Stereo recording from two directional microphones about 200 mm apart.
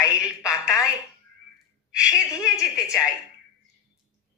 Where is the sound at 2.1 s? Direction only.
15° left (ahead or behind).